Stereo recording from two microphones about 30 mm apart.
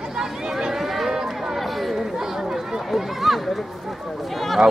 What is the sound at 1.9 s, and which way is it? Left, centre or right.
Chatter, centre.